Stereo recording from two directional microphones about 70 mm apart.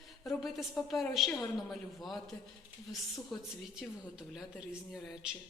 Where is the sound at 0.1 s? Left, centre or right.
Centre.